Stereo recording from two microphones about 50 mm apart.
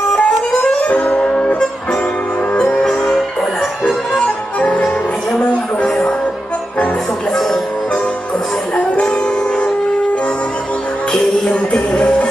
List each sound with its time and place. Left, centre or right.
0.1 s music: left
4.6 s music: left
9.0 s music: left
11.7 s music: left